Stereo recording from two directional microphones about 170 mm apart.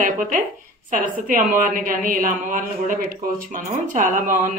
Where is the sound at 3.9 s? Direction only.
50° right (ahead or behind).